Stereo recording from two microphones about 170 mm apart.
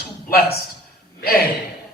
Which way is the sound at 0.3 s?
65° left (ahead or behind).